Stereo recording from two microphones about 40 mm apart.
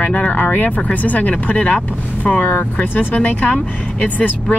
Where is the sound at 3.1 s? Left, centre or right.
Left.